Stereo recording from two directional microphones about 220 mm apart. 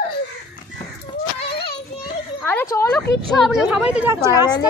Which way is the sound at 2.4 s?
10° left (ahead or behind).